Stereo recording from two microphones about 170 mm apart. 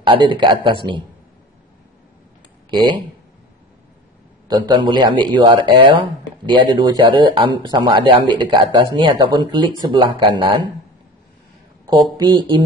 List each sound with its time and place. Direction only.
0.0 s speech: 30° right (ahead or behind)
2.7 s speech: 25° right (ahead or behind)
4.5 s speech: 25° right (ahead or behind)
11.9 s speech: 25° right (ahead or behind)